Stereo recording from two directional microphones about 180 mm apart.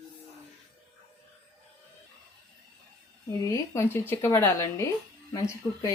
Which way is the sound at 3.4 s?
15° left (ahead or behind).